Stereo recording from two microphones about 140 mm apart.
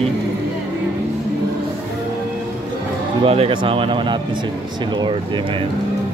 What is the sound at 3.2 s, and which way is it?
Speech, 45° right (ahead or behind).